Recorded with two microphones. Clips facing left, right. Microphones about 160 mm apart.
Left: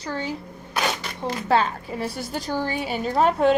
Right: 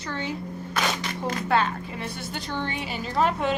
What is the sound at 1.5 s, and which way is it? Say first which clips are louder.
A woman's voice: left 4 dB; 35° left (ahead or behind).